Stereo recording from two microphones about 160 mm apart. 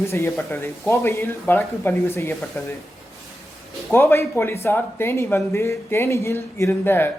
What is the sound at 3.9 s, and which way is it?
Speech, 15° left (ahead or behind).